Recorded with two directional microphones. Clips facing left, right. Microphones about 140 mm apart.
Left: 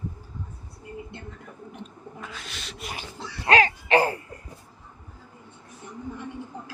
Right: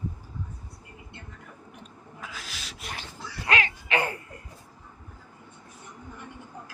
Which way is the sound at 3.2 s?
35° left (ahead or behind).